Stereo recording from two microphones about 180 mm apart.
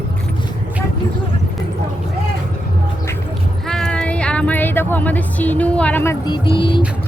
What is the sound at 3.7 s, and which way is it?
Music, 5° left (ahead or behind).